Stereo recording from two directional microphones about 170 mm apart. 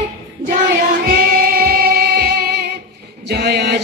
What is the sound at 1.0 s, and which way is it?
Singing, 60° right (ahead or behind).